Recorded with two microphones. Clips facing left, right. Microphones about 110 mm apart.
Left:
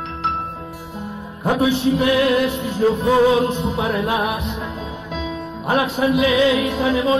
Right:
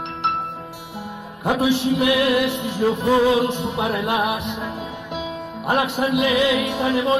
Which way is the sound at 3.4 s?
5° right (ahead or behind).